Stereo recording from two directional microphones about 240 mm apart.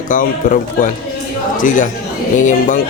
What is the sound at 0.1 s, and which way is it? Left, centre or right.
Speech, left.